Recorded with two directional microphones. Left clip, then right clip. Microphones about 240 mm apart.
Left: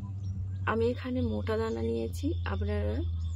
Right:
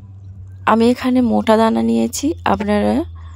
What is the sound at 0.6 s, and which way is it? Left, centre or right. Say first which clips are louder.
A woman's voice: right 16 dB; right.